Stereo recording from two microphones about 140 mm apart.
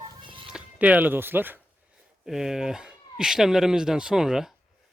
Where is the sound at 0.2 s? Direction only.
35° right (ahead or behind).